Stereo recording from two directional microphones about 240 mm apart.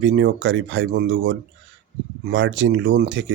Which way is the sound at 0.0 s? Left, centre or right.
Right.